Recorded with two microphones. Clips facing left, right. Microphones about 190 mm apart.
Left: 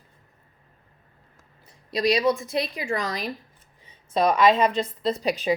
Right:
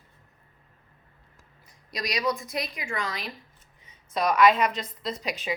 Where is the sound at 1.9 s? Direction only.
30° left (ahead or behind).